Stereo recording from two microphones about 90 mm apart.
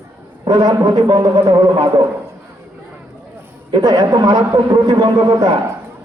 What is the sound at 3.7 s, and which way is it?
A man's voice, 50° right (ahead or behind).